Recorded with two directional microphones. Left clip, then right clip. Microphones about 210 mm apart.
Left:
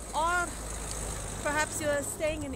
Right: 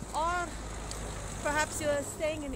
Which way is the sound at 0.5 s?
50° left (ahead or behind).